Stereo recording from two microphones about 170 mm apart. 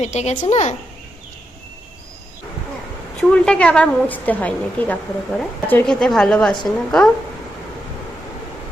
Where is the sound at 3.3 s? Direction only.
5° left (ahead or behind).